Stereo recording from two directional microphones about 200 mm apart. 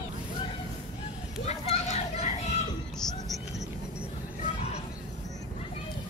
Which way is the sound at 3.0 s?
Centre (ahead or behind).